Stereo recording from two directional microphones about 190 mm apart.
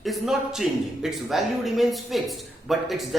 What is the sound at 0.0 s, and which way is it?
A man's voice, centre (ahead or behind).